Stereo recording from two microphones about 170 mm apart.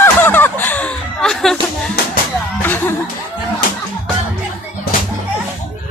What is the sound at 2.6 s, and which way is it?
Music, 10° left (ahead or behind).